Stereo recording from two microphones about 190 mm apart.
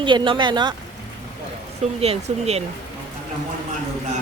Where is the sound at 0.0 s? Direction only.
25° right (ahead or behind).